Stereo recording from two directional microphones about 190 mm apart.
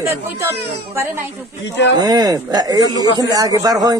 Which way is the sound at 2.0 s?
20° right (ahead or behind).